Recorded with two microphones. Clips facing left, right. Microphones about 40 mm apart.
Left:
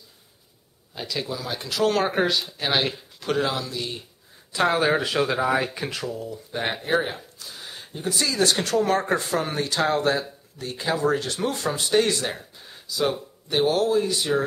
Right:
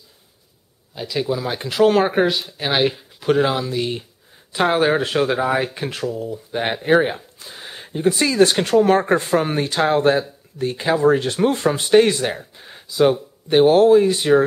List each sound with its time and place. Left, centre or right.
0.9 s speech: centre
1.3 s speech: right